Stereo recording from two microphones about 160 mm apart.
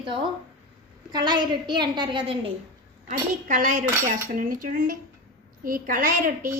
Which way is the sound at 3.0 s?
55° right (ahead or behind).